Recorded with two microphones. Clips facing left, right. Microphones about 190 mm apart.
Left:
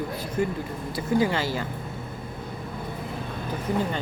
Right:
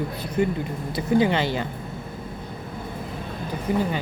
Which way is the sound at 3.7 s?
15° right (ahead or behind).